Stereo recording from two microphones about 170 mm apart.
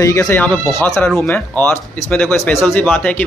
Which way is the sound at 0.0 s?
15° left (ahead or behind).